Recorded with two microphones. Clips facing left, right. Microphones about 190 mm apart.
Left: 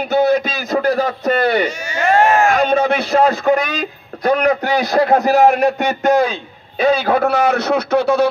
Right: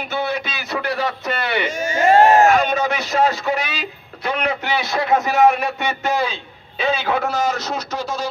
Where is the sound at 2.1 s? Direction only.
35° right (ahead or behind).